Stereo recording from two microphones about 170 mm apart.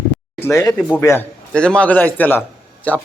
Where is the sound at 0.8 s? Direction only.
5° left (ahead or behind).